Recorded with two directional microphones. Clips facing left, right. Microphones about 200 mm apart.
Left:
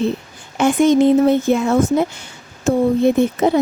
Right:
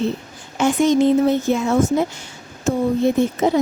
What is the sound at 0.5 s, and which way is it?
Speech, 55° left (ahead or behind).